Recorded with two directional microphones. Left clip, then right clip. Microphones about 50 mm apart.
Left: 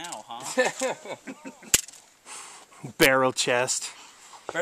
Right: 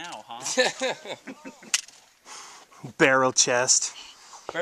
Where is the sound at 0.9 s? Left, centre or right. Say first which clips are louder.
Right 1 dB; right.